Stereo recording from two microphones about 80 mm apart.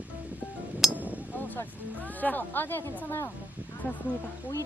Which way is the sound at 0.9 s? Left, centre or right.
Centre.